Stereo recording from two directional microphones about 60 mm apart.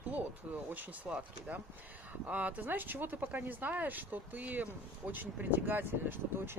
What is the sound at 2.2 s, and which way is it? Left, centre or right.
Speech, right.